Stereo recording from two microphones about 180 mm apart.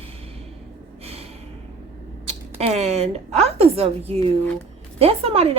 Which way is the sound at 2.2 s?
35° right (ahead or behind).